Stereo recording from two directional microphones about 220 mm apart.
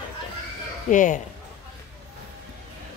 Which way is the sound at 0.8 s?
35° left (ahead or behind).